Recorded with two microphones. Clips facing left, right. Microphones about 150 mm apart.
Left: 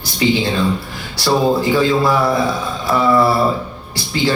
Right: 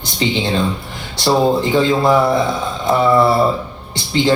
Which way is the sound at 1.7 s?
20° right (ahead or behind).